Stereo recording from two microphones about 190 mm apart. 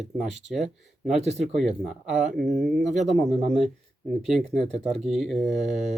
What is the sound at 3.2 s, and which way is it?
Speech, 5° left (ahead or behind).